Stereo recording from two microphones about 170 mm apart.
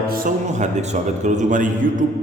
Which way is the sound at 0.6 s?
45° right (ahead or behind).